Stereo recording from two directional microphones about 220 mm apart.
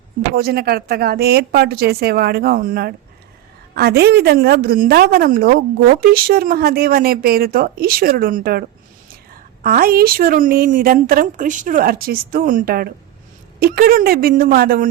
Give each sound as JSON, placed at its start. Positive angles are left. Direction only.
{"t": 0.3, "sound": "a woman's voice", "side_deg": -45}
{"t": 9.6, "sound": "a woman's voice", "side_deg": -40}